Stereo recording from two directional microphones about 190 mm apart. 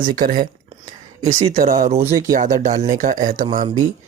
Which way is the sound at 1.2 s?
35° right (ahead or behind).